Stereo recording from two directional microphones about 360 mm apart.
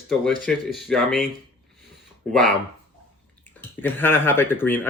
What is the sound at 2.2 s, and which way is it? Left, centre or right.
Speech, centre.